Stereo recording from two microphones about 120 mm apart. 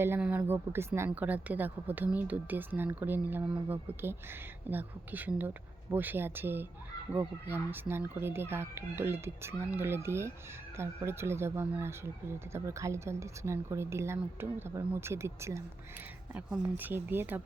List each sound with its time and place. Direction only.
0.0 s a woman's voice: 15° right (ahead or behind)
16.3 s a woman's voice: 15° right (ahead or behind)